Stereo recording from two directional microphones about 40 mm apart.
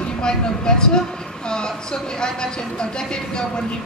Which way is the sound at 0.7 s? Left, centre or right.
Left.